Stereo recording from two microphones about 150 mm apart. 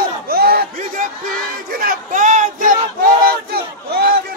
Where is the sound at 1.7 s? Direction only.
70° right (ahead or behind).